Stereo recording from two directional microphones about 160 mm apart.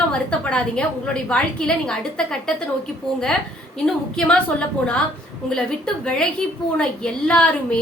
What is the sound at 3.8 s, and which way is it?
A woman's voice, 5° left (ahead or behind).